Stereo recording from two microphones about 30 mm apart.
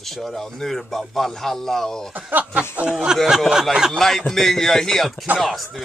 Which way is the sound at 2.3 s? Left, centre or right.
Right.